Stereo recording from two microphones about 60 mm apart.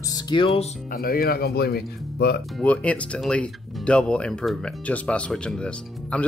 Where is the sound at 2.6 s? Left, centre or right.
Left.